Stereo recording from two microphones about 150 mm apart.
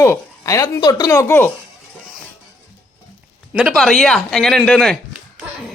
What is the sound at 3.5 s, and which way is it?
Speech, centre (ahead or behind).